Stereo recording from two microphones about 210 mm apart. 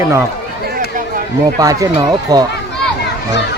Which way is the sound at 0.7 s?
40° right (ahead or behind).